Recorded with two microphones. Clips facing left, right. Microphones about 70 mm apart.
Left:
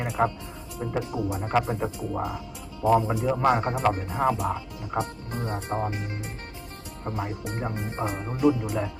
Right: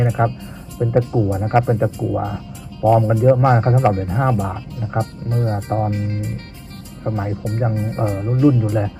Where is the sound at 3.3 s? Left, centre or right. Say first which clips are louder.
Right 3 dB; centre.